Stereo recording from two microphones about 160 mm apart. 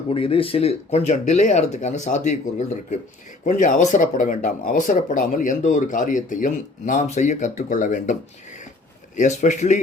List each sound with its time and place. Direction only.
0.1 s speech: 35° left (ahead or behind); by 8.1 s 50° left (ahead or behind)
9.1 s speech: 50° left (ahead or behind)